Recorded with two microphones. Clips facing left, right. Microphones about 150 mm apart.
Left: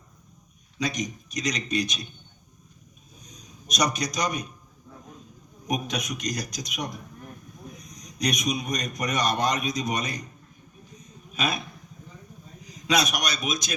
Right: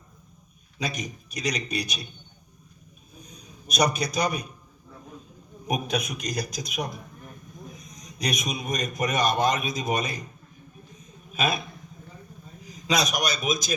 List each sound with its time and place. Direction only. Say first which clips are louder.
0.8 s a man's voice: left 3 dB; 5° right (ahead or behind)
3.2 s a man's voice: even; 5° right (ahead or behind)
5.6 s a man's voice: right 2 dB; 5° right (ahead or behind)
7.7 s a sound: even; centre (ahead or behind)
8.4 s a man's voice: left 3 dB; 50° right (ahead or behind)
8.7 s a man's voice: right 2 dB; 5° right (ahead or behind)
11.3 s a man's voice: right 2 dB; 5° right (ahead or behind)
12.9 s a man's voice: even; centre (ahead or behind)